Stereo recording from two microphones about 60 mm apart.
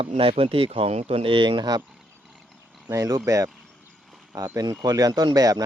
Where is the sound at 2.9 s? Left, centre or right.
Right.